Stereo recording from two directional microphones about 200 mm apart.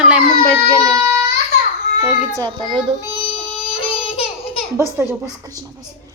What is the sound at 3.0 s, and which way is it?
Child singing, 25° left (ahead or behind).